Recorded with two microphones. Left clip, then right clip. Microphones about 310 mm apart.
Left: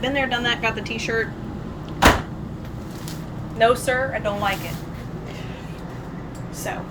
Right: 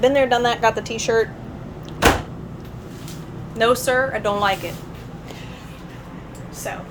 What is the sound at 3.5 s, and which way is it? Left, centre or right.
Speech, centre.